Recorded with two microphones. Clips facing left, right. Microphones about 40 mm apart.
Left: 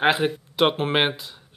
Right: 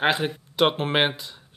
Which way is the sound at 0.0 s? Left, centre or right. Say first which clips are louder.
Left 3 dB; centre.